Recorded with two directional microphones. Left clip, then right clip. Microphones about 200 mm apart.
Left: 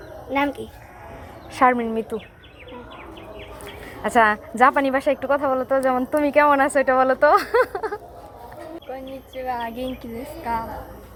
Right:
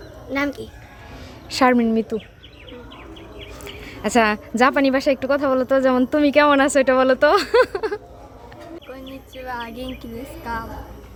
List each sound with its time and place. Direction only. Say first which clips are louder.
0.3 s speech: left 1 dB; 10° right (ahead or behind)
1.5 s a woman's voice: right 1 dB; 40° right (ahead or behind)
3.8 s a woman's voice: left 1 dB; 30° right (ahead or behind); by 7.8 s 45° right (ahead or behind)
9.3 s a woman's voice: left 3 dB; 20° right (ahead or behind)